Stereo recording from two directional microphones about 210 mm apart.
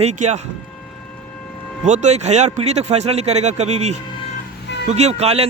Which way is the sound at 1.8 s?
35° right (ahead or behind).